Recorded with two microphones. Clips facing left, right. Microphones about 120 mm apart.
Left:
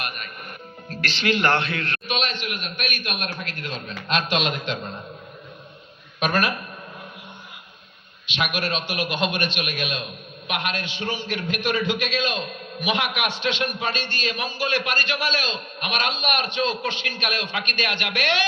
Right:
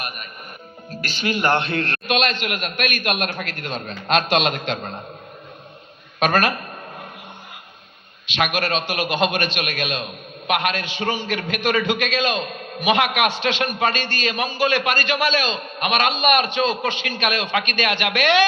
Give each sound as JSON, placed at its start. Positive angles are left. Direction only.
{"t": 1.3, "sound": "speech", "side_deg": -10}
{"t": 1.6, "sound": "a man's voice", "side_deg": -35}
{"t": 2.1, "sound": "a man's voice", "side_deg": -90}
{"t": 4.4, "sound": "a man's voice", "side_deg": -80}
{"t": 6.2, "sound": "a man's voice", "side_deg": -75}
{"t": 8.4, "sound": "a man's voice", "side_deg": -90}